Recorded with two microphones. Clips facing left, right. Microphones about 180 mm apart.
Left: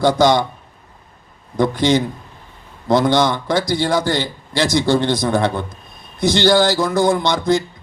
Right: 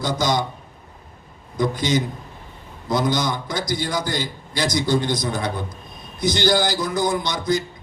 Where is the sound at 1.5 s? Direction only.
60° left (ahead or behind).